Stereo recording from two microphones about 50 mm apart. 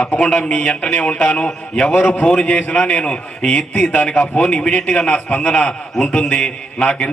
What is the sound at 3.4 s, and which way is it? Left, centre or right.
Speech, centre.